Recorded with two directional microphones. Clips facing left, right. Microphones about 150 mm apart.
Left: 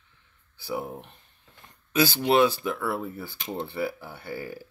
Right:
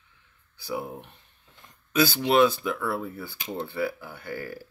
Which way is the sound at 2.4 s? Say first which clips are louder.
Right 1 dB; 20° left (ahead or behind).